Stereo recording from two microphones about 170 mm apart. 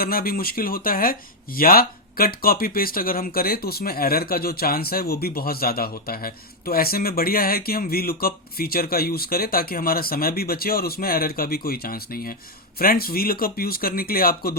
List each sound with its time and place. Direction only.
0.0 s speech: 60° left (ahead or behind)